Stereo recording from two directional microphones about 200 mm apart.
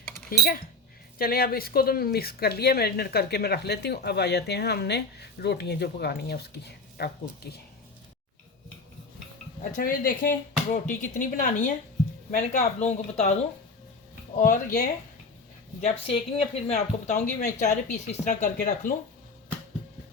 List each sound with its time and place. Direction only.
0.3 s speech: 45° left (ahead or behind)
9.7 s speech: 45° left (ahead or behind)
15.8 s speech: 30° left (ahead or behind)